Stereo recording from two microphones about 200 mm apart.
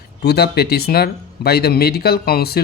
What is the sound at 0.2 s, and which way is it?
Speech, 55° left (ahead or behind).